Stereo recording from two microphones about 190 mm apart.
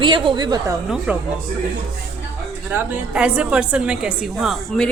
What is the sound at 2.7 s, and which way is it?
A woman's voice, 5° right (ahead or behind).